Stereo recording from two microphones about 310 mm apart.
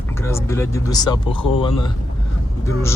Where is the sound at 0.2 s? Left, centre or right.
Centre.